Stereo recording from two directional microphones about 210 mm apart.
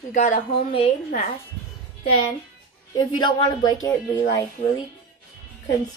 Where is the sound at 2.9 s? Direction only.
20° left (ahead or behind).